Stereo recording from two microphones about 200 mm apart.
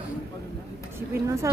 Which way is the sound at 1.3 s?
15° right (ahead or behind).